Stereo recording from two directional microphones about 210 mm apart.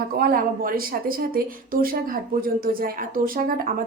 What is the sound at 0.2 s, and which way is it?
A woman's voice, 45° right (ahead or behind).